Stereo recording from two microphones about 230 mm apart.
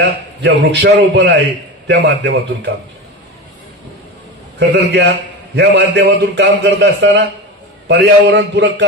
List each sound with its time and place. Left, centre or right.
0.0 s a man's voice: right
4.6 s a man's voice: right